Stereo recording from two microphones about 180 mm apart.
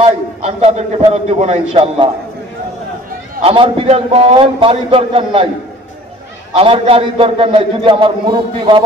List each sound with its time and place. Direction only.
0.0 s a man's voice: 35° right (ahead or behind)
3.4 s a man's voice: 30° right (ahead or behind)
6.5 s a man's voice: 30° right (ahead or behind)